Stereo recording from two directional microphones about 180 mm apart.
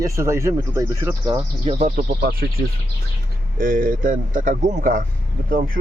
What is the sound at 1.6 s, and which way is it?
Speech, 35° right (ahead or behind).